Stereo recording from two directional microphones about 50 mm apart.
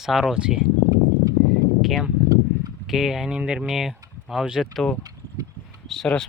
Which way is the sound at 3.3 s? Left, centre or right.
Right.